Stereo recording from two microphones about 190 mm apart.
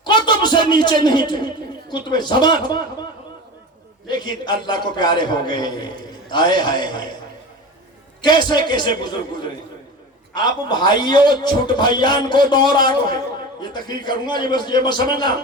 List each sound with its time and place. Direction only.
0.0 s music: 25° left (ahead or behind)
0.7 s a man's voice: 25° left (ahead or behind)
4.1 s a man's voice: 25° left (ahead or behind)
8.4 s a man's voice: 25° left (ahead or behind)